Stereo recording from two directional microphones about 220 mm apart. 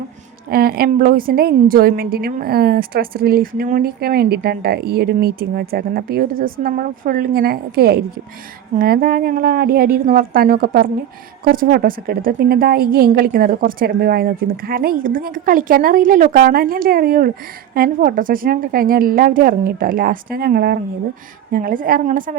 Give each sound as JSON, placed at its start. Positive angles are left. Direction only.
{"t": 0.4, "sound": "a woman's voice", "side_deg": -40}